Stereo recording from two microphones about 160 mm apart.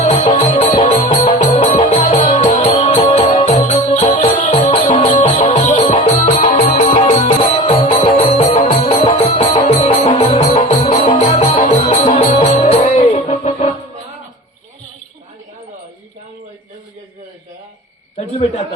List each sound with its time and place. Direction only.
0.0 s music: 55° left (ahead or behind)
5.0 s music: 35° left (ahead or behind)
6.1 s music: 50° left (ahead or behind)
6.9 s music: 50° left (ahead or behind)
12.5 s music: 40° left (ahead or behind)